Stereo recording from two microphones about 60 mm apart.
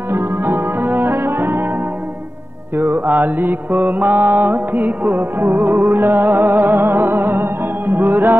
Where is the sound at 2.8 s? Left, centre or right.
Right.